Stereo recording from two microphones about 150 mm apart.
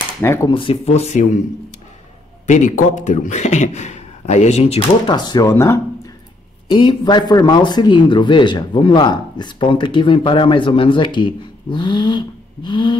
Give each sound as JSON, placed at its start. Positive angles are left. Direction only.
{"t": 0.2, "sound": "speech", "side_deg": 20}
{"t": 0.6, "sound": "speech", "side_deg": 40}
{"t": 2.4, "sound": "speech", "side_deg": 55}
{"t": 6.7, "sound": "speech", "side_deg": 30}